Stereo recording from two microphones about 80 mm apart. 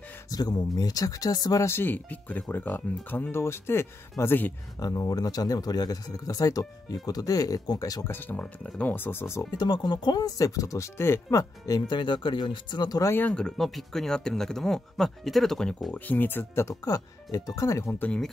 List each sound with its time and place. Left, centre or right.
0.3 s speech: left
1.7 s speech: left
4.7 s speech: left
8.1 s speech: left
9.6 s speech: left
11.9 s speech: left
13.3 s speech: centre
15.9 s speech: left
16.6 s speech: left